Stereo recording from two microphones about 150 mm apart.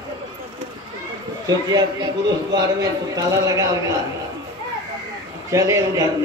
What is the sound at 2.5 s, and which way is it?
A man's voice, 25° right (ahead or behind).